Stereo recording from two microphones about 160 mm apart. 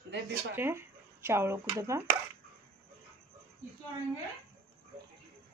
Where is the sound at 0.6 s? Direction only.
15° right (ahead or behind).